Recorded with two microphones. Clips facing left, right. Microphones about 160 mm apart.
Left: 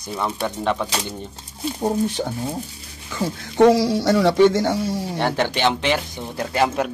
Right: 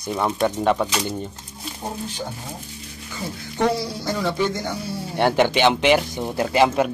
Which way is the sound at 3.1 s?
90° left.